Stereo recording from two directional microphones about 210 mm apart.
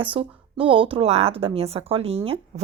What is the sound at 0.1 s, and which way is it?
Speech, 25° right (ahead or behind).